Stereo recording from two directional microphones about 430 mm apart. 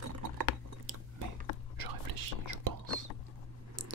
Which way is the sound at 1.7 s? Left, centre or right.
Right.